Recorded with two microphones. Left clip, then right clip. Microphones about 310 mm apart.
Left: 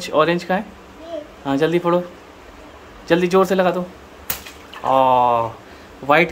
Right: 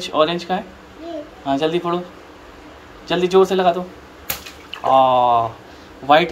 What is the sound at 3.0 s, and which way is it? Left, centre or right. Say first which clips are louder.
Speech: even; centre.